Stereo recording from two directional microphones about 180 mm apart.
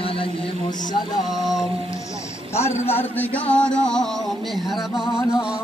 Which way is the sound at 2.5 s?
15° left (ahead or behind).